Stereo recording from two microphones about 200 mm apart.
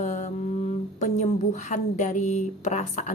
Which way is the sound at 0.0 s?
35° left (ahead or behind).